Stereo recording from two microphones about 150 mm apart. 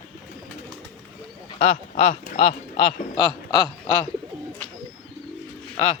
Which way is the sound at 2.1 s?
70° left (ahead or behind).